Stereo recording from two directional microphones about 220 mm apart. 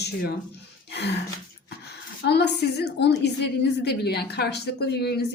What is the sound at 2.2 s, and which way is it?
A woman's voice, 50° left (ahead or behind).